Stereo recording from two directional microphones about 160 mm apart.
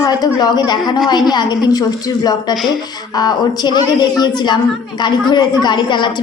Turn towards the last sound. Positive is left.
turn(degrees=30)  # may be behind; listen again after turning